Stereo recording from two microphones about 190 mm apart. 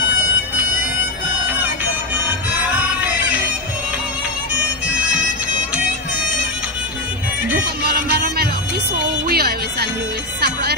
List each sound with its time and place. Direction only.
7.8 s music: 50° right (ahead or behind)